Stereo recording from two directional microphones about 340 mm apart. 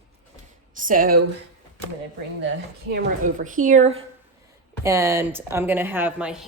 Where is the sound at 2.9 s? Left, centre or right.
Right.